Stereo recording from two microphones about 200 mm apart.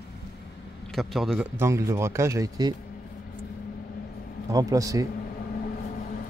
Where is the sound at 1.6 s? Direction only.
15° right (ahead or behind).